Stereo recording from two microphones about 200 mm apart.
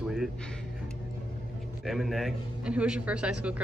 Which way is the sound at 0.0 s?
5° right (ahead or behind).